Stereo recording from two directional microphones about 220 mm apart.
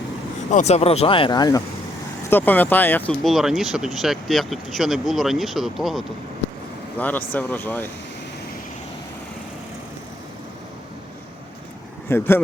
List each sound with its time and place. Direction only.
0.5 s speech: 30° left (ahead or behind); by 7.9 s 10° left (ahead or behind)
12.0 s speech: 10° left (ahead or behind)